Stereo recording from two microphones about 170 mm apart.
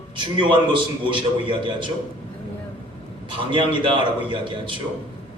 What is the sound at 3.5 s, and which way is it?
A man's voice, 30° right (ahead or behind).